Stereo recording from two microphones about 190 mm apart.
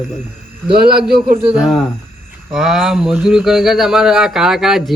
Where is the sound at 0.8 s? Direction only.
55° right (ahead or behind).